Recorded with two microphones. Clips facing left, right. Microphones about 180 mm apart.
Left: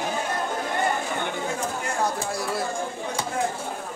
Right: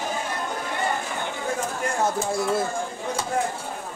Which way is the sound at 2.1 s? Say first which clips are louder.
Right 4 dB; 25° right (ahead or behind).